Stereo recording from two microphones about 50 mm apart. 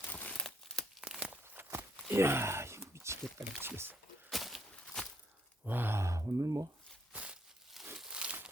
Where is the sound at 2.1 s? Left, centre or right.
Right.